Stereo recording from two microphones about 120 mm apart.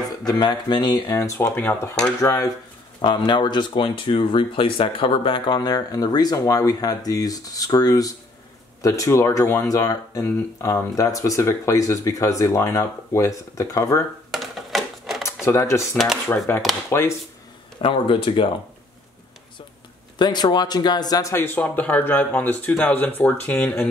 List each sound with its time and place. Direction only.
0.3 s speech: 35° left (ahead or behind)
1.0 s speech: 25° left (ahead or behind)
2.2 s speech: 30° left (ahead or behind)
3.0 s speech: 40° left (ahead or behind)
14.3 s a sound: centre (ahead or behind)
15.4 s speech: 25° left (ahead or behind)
17.8 s speech: 45° left (ahead or behind)
20.2 s speech: 35° left (ahead or behind); by 23.7 s 15° left (ahead or behind)